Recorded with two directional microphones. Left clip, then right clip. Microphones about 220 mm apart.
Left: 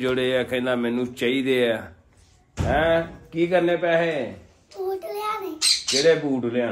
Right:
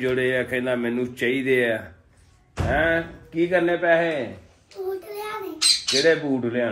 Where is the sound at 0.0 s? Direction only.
15° left (ahead or behind).